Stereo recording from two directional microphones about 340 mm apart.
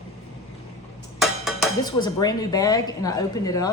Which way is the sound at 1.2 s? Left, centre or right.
Centre.